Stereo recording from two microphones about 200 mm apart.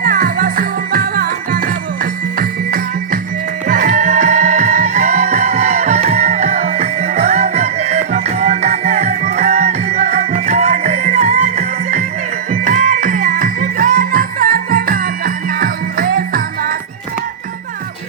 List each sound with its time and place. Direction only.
0.0 s music: 45° right (ahead or behind)